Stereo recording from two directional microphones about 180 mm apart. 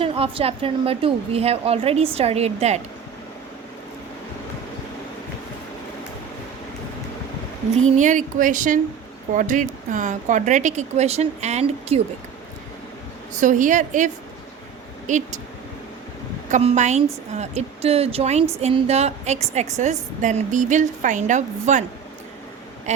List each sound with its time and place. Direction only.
0.0 s a woman's voice: 30° right (ahead or behind)
7.9 s speech: 45° right (ahead or behind)
13.3 s speech: 45° right (ahead or behind)
16.5 s a woman's voice: 40° right (ahead or behind)
22.9 s quack: 40° right (ahead or behind)